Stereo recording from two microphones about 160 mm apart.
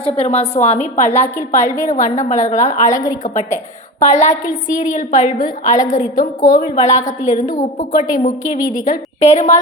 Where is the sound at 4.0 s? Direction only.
45° left (ahead or behind).